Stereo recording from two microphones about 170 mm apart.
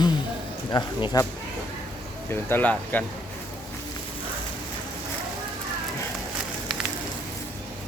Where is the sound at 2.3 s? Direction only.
10° left (ahead or behind).